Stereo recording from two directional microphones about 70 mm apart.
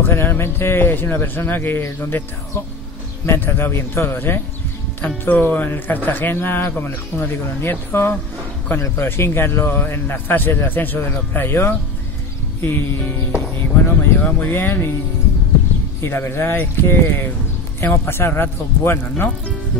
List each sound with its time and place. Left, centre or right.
0.0 s a man's voice: left
16.0 s a man's voice: left